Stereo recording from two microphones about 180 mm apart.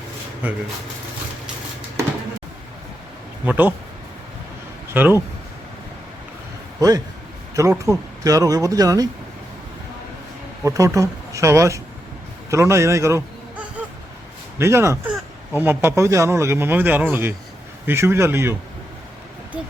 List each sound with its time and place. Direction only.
0.4 s speech: 10° right (ahead or behind)
3.4 s speech: 10° right (ahead or behind)
4.9 s speech: 10° right (ahead or behind)
6.7 s a man's voice: 20° right (ahead or behind)
10.6 s speech: 15° right (ahead or behind)
12.5 s a sound: 15° right (ahead or behind)
14.6 s speech: 15° right (ahead or behind)